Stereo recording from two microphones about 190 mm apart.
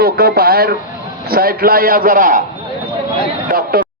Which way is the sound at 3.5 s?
55° right (ahead or behind).